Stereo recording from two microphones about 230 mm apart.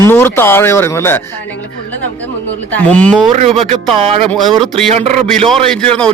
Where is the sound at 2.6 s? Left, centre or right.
Centre.